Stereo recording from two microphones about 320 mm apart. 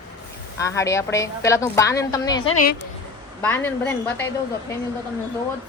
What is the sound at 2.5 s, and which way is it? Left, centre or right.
Speech, left.